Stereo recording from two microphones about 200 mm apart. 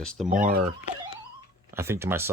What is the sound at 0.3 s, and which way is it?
Speech, 40° right (ahead or behind).